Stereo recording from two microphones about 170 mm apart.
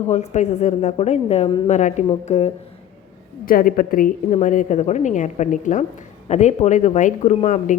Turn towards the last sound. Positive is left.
turn(degrees=45)  # may be behind; listen again after turning